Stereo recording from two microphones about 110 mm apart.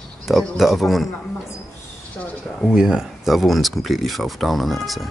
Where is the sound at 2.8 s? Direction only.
5° right (ahead or behind).